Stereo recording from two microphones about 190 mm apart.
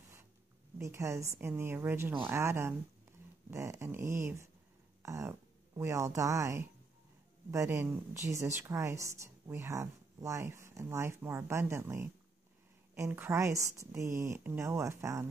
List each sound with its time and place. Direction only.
0.7 s speech: 15° right (ahead or behind)